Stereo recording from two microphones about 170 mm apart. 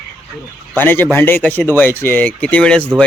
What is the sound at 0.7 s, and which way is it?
Speech, 10° left (ahead or behind).